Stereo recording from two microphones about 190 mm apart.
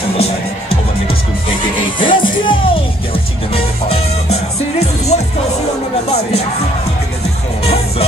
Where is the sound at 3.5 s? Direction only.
30° left (ahead or behind).